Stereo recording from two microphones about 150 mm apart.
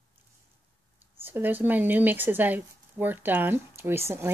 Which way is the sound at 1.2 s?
15° right (ahead or behind).